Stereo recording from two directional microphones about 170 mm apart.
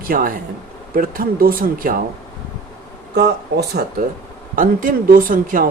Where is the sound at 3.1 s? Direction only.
75° right (ahead or behind).